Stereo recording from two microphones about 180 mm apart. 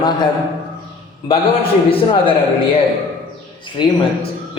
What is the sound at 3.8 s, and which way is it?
Speech, 25° left (ahead or behind).